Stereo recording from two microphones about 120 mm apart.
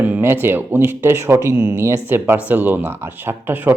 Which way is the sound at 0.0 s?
20° right (ahead or behind).